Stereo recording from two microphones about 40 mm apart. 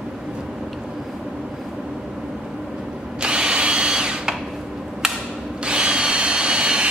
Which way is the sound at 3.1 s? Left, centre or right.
Right.